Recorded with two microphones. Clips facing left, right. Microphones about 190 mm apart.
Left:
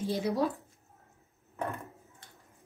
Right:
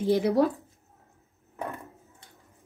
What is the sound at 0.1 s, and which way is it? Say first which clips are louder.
Speech: right 8 dB; 55° right (ahead or behind).